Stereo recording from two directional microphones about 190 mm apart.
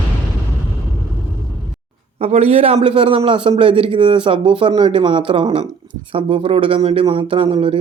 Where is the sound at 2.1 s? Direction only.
35° right (ahead or behind).